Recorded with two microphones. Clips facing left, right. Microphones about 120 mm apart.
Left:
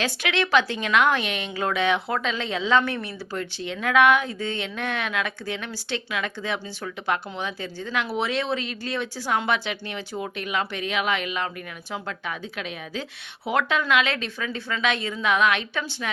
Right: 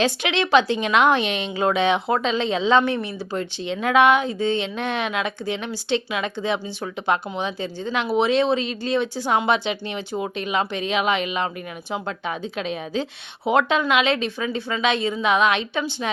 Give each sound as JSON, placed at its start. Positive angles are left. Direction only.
{"t": 0.0, "sound": "a woman's voice", "side_deg": -25}